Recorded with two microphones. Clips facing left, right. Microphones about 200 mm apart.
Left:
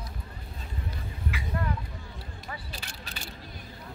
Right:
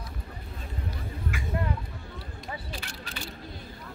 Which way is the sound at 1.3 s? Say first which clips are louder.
Right 2 dB; 50° right (ahead or behind).